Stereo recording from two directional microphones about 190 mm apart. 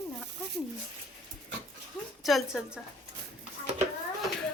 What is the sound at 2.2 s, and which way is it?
Speech, centre (ahead or behind).